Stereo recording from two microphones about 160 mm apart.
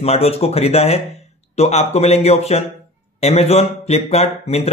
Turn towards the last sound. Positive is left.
turn(degrees=40)  # may be behind; listen again after turning